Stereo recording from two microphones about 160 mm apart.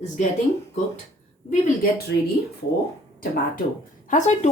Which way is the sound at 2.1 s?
90° left.